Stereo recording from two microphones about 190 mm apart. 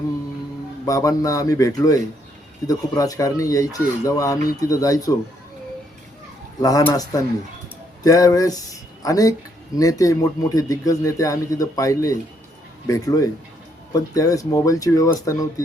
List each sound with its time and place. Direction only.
0.9 s speech: 20° left (ahead or behind)
6.6 s a man's voice: 20° left (ahead or behind)